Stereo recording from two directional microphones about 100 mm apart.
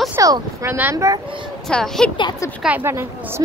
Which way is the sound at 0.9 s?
30° right (ahead or behind).